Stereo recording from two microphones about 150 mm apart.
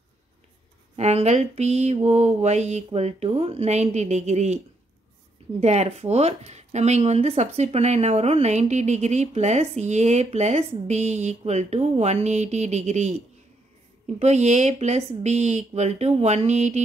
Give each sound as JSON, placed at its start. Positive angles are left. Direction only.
{"t": 0.9, "sound": "speech", "side_deg": -45}
{"t": 5.6, "sound": "speech", "side_deg": -45}